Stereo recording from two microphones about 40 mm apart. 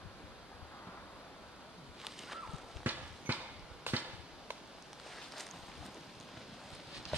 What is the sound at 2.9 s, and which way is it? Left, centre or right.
Clip-clop, right.